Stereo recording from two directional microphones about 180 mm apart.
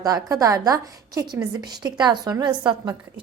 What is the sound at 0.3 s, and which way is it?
A woman's voice, 20° right (ahead or behind).